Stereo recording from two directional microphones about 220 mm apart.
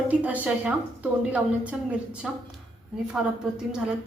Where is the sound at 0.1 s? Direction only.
5° right (ahead or behind).